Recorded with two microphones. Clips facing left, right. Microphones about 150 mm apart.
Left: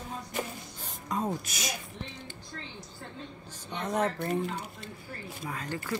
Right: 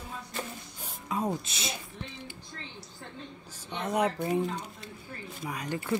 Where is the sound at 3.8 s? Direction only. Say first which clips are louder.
Right 1 dB; 10° right (ahead or behind).